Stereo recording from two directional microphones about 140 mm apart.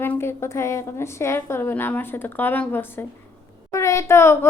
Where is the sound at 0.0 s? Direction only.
15° left (ahead or behind).